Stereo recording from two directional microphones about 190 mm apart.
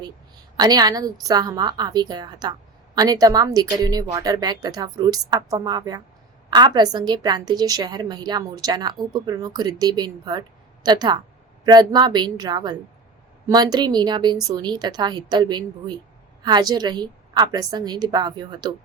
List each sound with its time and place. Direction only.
0.5 s a woman's voice: 20° right (ahead or behind)